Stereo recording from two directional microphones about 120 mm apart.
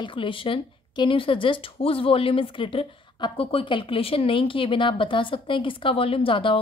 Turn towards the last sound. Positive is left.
turn(degrees=45)  # may be behind; listen again after turning